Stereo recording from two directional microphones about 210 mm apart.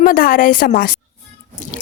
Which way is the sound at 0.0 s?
40° left (ahead or behind).